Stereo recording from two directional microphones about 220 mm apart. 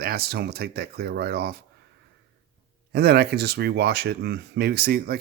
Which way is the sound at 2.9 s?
45° right (ahead or behind).